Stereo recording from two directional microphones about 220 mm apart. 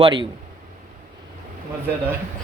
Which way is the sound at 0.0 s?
20° right (ahead or behind).